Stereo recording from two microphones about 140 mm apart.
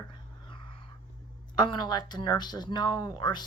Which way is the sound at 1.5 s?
30° left (ahead or behind).